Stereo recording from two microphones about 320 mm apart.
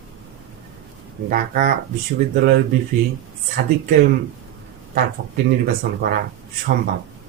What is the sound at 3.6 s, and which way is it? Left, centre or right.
Speech, right.